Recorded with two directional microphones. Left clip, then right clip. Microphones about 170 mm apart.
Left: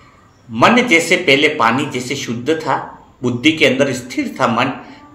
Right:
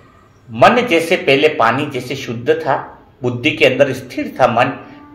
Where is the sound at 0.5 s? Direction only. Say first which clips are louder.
Right 1 dB; 40° right (ahead or behind).